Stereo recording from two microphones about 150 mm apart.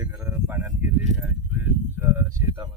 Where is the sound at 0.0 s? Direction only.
20° right (ahead or behind).